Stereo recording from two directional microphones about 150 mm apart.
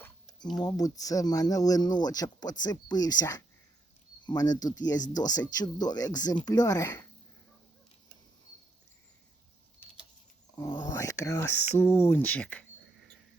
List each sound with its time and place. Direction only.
0.6 s speech: 25° left (ahead or behind)
10.5 s speech: 25° left (ahead or behind); by 12.6 s 10° left (ahead or behind)